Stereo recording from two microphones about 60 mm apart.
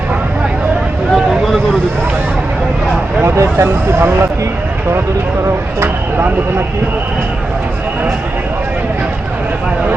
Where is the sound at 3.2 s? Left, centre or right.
Right.